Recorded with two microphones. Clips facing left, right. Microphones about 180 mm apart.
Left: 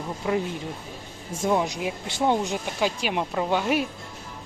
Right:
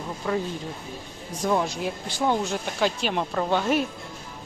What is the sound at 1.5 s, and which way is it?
Speech, 15° left (ahead or behind).